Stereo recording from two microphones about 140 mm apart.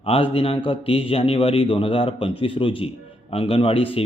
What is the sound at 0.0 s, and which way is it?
A man's voice, 45° left (ahead or behind).